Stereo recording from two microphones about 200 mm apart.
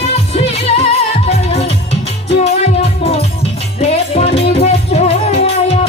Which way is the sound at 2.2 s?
30° left (ahead or behind).